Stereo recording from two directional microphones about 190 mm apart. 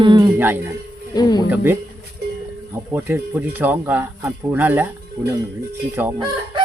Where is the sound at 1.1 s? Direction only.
20° left (ahead or behind).